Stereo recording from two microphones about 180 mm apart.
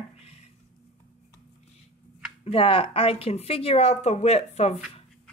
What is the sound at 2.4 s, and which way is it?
A woman's voice, 30° left (ahead or behind).